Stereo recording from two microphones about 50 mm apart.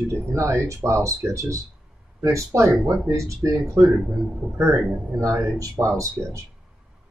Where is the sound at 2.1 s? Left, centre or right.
Right.